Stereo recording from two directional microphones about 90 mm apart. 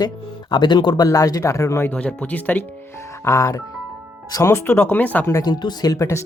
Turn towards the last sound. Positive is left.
turn(degrees=45)  # may be behind; listen again after turning